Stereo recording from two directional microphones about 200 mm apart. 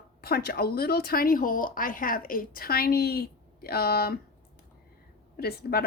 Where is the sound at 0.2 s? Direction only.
50° left (ahead or behind).